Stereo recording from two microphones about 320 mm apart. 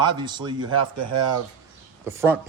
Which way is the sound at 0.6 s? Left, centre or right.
Right.